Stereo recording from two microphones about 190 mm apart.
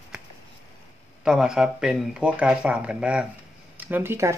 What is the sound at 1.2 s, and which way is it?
A man's voice, 5° right (ahead or behind).